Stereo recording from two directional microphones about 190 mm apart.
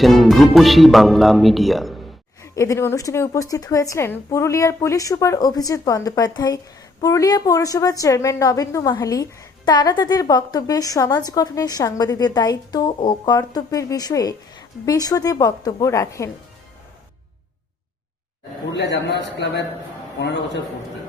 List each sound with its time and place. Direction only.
0.0 s speech: centre (ahead or behind)
2.4 s a woman's voice: 15° left (ahead or behind)
18.7 s a man's voice: 65° left (ahead or behind)